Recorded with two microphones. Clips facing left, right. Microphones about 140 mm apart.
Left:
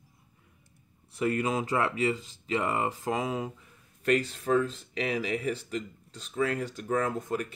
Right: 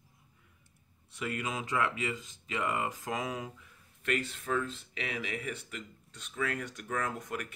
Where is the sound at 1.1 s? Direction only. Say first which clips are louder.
Left 8 dB; 35° left (ahead or behind).